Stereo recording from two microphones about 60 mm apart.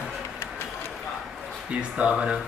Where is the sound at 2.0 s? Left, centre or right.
Centre.